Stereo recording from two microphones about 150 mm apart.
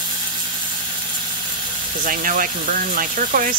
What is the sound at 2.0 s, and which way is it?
Speech, 65° right (ahead or behind).